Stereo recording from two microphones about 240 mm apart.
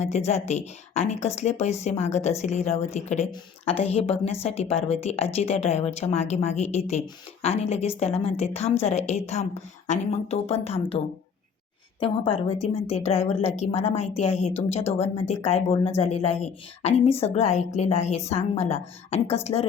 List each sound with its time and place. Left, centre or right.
0.0 s a woman's voice: left